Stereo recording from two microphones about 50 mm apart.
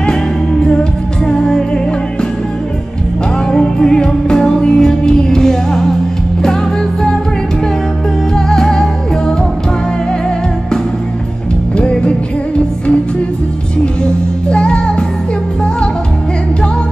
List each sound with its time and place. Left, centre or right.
1.2 s music: centre
3.5 s music: centre
8.4 s music: centre
11.7 s music: left
14.5 s music: centre